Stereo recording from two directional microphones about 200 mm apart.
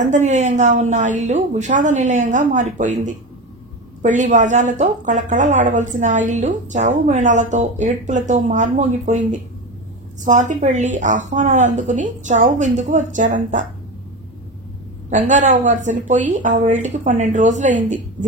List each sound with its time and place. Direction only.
0.0 s a woman's voice: 35° right (ahead or behind)
10.2 s a woman's voice: 40° right (ahead or behind)
15.0 s a woman's voice: 40° right (ahead or behind)